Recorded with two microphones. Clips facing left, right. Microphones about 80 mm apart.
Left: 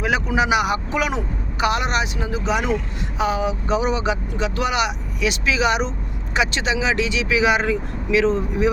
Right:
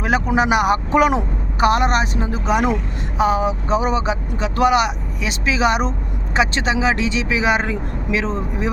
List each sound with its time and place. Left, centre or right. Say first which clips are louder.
0.0 s speech: right 2 dB; right